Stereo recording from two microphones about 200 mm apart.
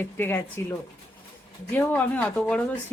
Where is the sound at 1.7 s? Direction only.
10° left (ahead or behind).